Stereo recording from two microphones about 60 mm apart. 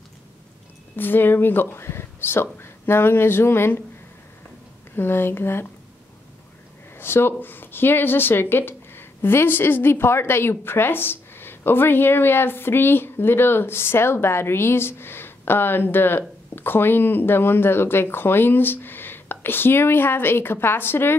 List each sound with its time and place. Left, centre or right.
0.9 s speech: left
4.9 s speech: left
7.0 s speech: left